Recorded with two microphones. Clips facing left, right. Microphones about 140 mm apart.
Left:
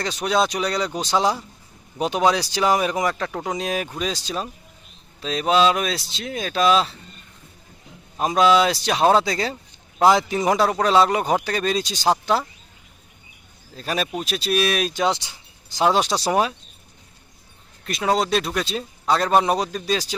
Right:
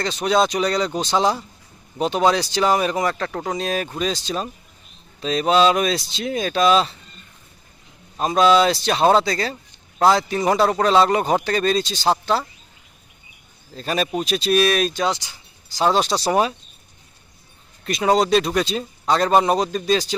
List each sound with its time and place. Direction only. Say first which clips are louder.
0.0 s a man's voice: right 2 dB; 5° left (ahead or behind)
8.2 s speech: right 1 dB; 5° left (ahead or behind)
9.2 s speech: right 1 dB; 15° left (ahead or behind)
13.7 s a man's voice: right 3 dB; 5° left (ahead or behind)
15.0 s speech: left 1 dB; 25° left (ahead or behind)
15.8 s speech: right 1 dB; 10° left (ahead or behind)
17.8 s a man's voice: right 4 dB; centre (ahead or behind)